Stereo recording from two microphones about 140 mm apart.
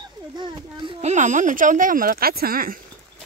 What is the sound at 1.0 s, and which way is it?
Speech, 55° right (ahead or behind).